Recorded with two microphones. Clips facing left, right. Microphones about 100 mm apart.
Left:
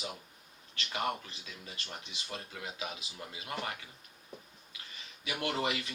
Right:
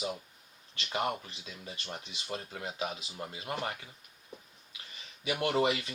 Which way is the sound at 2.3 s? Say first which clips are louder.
Right 4 dB; 35° right (ahead or behind).